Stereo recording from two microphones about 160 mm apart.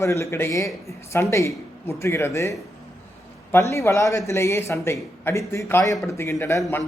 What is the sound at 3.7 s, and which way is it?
Speech, 20° left (ahead or behind).